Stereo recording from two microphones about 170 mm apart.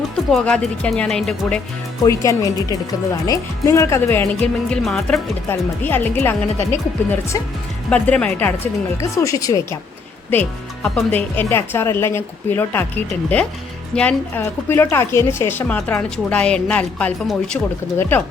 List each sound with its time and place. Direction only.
0.3 s speech: 5° left (ahead or behind)
2.0 s a woman's voice: 20° left (ahead or behind)
10.8 s a woman's voice: 5° left (ahead or behind)
13.9 s a woman's voice: 5° left (ahead or behind)